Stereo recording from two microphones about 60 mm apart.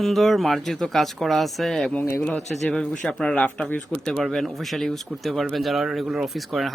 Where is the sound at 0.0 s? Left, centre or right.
Centre.